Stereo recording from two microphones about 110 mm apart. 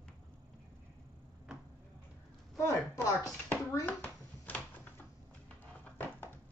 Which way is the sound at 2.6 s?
25° left (ahead or behind).